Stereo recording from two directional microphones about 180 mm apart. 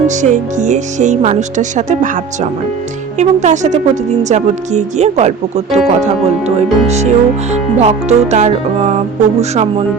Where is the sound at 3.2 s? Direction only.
40° right (ahead or behind).